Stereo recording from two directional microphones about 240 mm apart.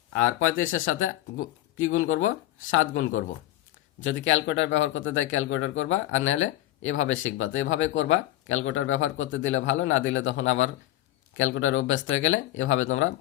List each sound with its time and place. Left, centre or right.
0.1 s speech: left